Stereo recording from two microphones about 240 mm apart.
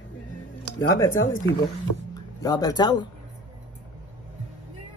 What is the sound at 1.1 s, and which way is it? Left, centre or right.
Speech, left.